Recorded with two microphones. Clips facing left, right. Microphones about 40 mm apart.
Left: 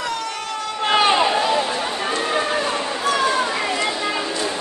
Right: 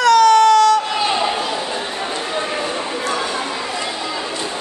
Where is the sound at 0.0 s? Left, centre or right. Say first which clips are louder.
Right 16 dB; right.